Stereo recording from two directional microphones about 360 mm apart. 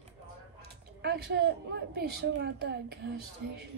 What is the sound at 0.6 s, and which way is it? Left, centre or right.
A woman's voice, right.